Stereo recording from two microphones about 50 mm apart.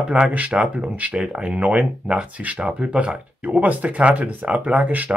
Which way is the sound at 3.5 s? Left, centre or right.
Right.